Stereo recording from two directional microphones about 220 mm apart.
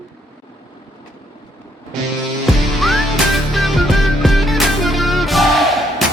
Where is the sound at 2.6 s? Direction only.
Centre (ahead or behind).